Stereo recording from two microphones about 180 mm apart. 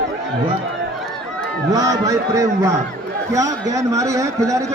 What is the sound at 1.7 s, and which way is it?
A man's voice, 20° right (ahead or behind).